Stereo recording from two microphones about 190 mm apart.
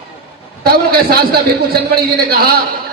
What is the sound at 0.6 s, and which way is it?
A man's voice, 55° right (ahead or behind).